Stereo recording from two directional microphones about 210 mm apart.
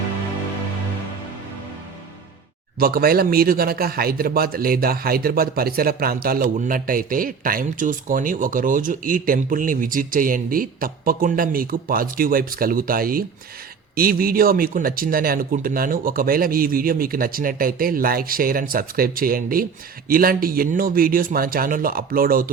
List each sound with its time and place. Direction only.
2.7 s speech: 45° right (ahead or behind)